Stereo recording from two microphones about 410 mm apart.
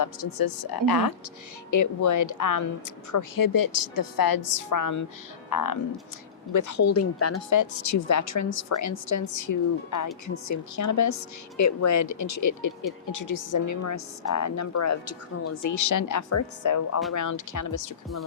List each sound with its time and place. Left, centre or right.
0.0 s a woman's voice: left
1.7 s speech: left